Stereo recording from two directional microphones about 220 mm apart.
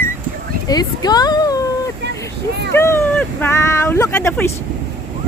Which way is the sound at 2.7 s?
10° left (ahead or behind).